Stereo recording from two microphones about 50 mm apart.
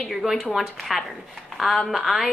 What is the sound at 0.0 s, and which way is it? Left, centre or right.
A woman's voice, centre.